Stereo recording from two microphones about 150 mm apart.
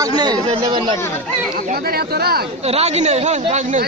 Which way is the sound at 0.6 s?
30° right (ahead or behind).